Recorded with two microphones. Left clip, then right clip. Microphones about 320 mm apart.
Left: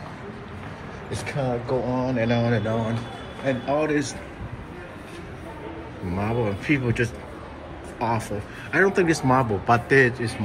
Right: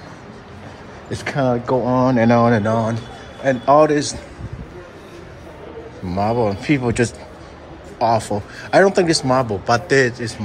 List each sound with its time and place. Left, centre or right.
1.4 s speech: right
2.1 s speech: right
3.4 s speech: right
3.8 s speech: centre
6.1 s a man's voice: centre